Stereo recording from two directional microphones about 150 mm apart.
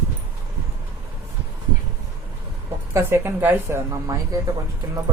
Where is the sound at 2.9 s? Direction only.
15° right (ahead or behind).